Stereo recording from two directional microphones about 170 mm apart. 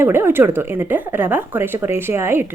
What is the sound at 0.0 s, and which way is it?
A woman's voice, 15° right (ahead or behind).